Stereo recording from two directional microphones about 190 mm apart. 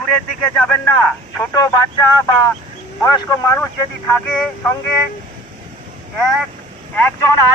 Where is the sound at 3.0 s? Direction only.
15° left (ahead or behind).